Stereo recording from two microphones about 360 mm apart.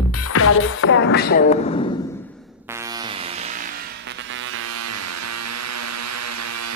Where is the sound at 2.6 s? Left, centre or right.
Centre; by 6.7 s right.